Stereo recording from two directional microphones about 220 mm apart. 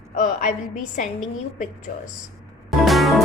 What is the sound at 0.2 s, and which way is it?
Speech, 35° left (ahead or behind).